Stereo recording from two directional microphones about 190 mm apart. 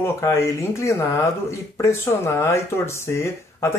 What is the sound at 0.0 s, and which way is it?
Speech, 15° left (ahead or behind).